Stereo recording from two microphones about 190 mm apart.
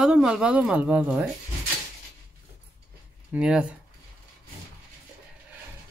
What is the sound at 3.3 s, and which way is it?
Speech, 5° right (ahead or behind).